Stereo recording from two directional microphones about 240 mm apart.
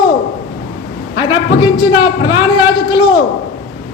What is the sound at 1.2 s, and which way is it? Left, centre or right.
A man's voice, centre.